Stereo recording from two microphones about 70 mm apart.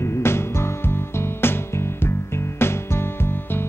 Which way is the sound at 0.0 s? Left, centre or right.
Left.